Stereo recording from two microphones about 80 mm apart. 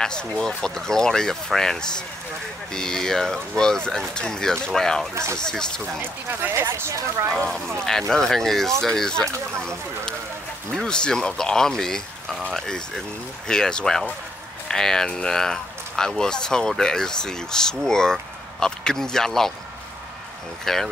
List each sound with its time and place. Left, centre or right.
0.0 s speech: centre
5.1 s speech: right
5.4 s speech: centre
6.4 s speech: right
7.3 s speech: centre
20.6 s speech: centre